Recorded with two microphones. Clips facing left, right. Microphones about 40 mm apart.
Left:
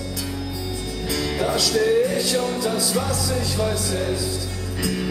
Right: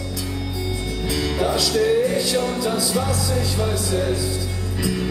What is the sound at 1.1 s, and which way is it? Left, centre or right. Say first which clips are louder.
Music: right 1 dB; centre.